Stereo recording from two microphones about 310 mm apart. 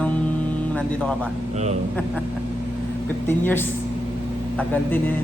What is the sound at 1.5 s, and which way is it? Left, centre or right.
Speech, right.